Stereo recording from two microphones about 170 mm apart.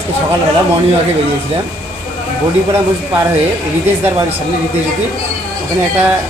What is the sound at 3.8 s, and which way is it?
Speech, 15° right (ahead or behind).